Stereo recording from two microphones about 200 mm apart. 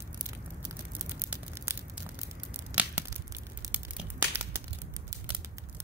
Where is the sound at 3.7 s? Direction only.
10° right (ahead or behind).